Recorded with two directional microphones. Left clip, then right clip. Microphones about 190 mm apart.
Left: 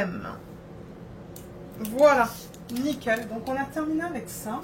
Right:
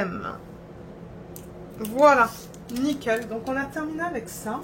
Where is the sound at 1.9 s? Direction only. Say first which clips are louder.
Right 2 dB; 35° right (ahead or behind).